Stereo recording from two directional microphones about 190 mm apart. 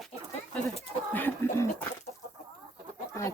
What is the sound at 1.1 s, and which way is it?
Speech, 10° left (ahead or behind).